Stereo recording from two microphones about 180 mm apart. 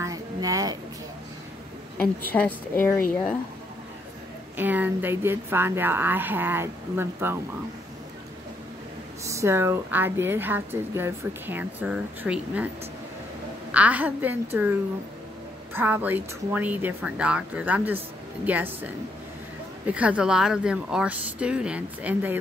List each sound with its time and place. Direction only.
0.0 s a sound: 20° right (ahead or behind)
2.0 s a woman's voice: 10° left (ahead or behind)
4.6 s a woman's voice: 10° right (ahead or behind)
9.2 s a woman's voice: 15° right (ahead or behind)
13.7 s a woman's voice: 10° right (ahead or behind)
15.7 s a woman's voice: 10° right (ahead or behind)
19.9 s speech: 5° right (ahead or behind)